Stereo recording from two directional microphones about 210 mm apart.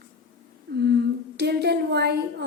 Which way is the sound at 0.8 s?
50° right (ahead or behind).